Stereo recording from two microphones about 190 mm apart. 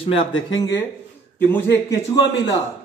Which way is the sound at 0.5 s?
20° left (ahead or behind).